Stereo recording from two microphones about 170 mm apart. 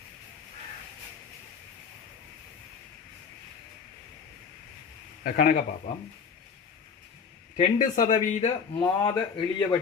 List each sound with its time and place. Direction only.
5.2 s speech: 55° left (ahead or behind)
7.5 s speech: 50° left (ahead or behind)
8.8 s a man's voice: 25° left (ahead or behind)